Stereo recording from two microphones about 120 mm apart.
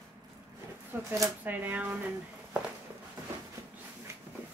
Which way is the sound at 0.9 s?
15° right (ahead or behind).